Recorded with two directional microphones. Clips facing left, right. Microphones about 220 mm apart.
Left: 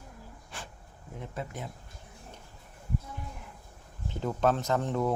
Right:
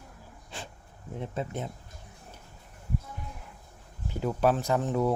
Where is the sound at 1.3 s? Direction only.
25° right (ahead or behind).